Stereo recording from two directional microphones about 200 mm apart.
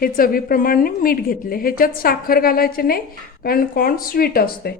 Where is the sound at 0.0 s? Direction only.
45° left (ahead or behind).